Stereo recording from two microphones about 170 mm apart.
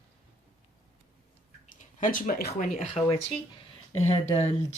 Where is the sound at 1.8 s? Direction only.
50° left (ahead or behind).